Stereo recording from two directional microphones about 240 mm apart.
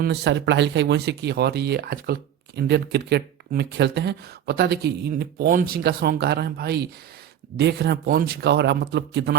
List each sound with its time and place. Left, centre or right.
0.0 s speech: right